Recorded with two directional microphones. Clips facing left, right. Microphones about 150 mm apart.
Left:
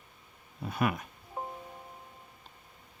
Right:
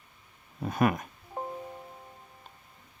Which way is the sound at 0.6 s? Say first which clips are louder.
Right 5 dB; 45° right (ahead or behind).